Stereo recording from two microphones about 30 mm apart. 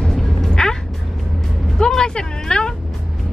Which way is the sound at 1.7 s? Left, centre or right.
Left.